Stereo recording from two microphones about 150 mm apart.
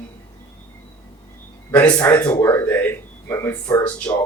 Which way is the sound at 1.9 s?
10° left (ahead or behind).